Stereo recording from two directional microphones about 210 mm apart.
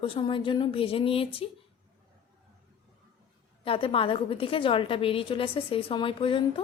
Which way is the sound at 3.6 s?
25° left (ahead or behind).